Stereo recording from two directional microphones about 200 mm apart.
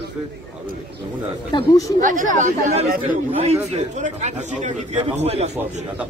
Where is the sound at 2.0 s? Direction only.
40° right (ahead or behind).